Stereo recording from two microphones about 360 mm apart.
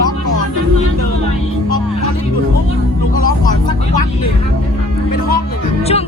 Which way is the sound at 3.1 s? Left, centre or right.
Left.